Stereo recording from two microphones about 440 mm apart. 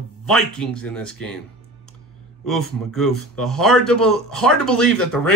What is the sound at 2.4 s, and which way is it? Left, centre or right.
A man's voice, centre.